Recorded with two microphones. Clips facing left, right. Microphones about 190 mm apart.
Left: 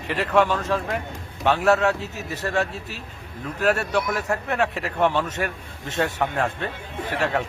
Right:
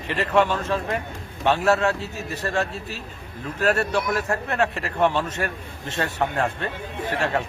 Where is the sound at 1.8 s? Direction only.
15° left (ahead or behind).